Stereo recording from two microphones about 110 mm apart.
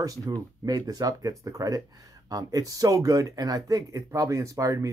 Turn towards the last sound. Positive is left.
turn(degrees=-30)  # may be behind; listen again after turning